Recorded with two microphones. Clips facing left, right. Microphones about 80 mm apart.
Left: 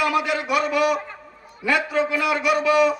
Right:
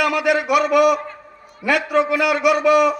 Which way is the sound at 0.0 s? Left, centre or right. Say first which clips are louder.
Right 4 dB; right.